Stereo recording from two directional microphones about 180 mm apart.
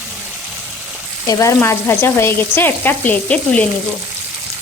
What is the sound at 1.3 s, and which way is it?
Speech, 15° left (ahead or behind).